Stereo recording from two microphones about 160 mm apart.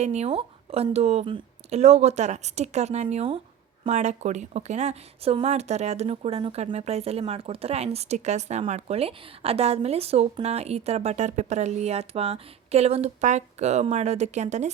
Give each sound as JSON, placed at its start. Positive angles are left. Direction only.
{"t": 0.0, "sound": "a woman's voice", "side_deg": -45}